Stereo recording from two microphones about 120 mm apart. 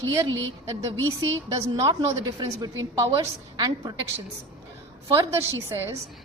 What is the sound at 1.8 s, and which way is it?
A woman's voice, 30° right (ahead or behind).